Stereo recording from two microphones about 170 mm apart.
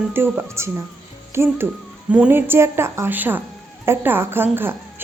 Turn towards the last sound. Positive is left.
turn(degrees=-15)  # may be behind; listen again after turning